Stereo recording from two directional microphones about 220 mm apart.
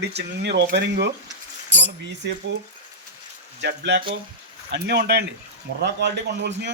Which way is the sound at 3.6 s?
50° right (ahead or behind).